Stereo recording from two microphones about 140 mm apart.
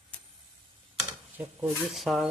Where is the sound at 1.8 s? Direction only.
Centre (ahead or behind).